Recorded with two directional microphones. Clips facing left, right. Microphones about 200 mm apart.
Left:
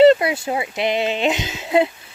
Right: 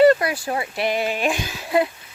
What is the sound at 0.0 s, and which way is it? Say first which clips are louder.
Speech: left 3 dB; 25° left (ahead or behind).